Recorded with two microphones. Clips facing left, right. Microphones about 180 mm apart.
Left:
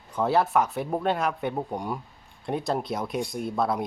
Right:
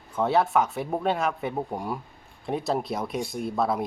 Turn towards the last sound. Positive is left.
turn(degrees=0)  # may be behind; listen again after turning